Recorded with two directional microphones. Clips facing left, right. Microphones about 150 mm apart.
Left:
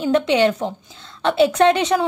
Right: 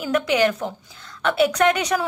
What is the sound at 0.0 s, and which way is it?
A woman's voice, 30° left (ahead or behind).